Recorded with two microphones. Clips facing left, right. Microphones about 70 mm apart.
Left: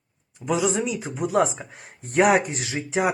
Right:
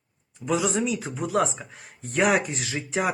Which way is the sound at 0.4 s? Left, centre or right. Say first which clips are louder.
Left 1 dB; centre.